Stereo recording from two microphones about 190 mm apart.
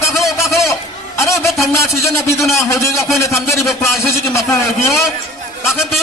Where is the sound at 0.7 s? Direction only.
15° left (ahead or behind).